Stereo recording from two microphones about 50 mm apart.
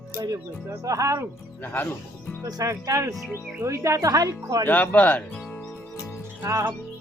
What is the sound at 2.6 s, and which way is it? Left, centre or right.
Speech, right.